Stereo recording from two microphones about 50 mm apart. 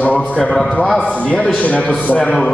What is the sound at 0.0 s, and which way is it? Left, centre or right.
Speech, left.